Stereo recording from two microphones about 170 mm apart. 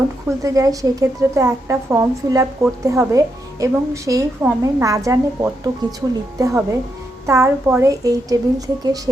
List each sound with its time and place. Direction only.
0.4 s a woman's voice: 20° right (ahead or behind)